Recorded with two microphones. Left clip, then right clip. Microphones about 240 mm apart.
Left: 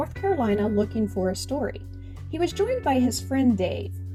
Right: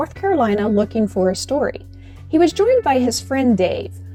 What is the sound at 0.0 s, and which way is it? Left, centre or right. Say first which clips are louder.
Speech: right 7 dB; right.